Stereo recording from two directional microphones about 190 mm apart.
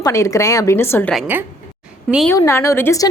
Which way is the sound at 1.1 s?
10° right (ahead or behind).